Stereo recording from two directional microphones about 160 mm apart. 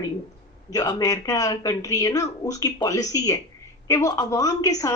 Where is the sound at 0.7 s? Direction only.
25° left (ahead or behind).